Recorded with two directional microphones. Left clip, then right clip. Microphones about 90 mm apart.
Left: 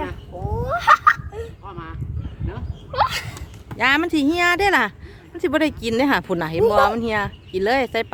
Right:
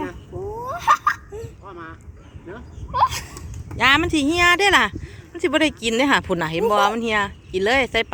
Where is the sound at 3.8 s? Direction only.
5° left (ahead or behind).